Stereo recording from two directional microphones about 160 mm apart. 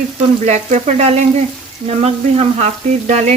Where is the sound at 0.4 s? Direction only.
45° right (ahead or behind).